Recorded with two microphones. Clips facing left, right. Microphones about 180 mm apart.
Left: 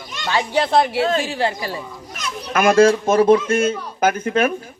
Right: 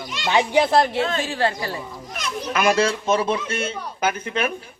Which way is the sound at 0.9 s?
35° left (ahead or behind).